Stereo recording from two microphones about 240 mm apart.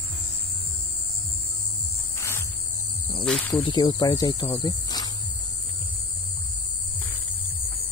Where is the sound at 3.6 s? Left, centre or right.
Centre.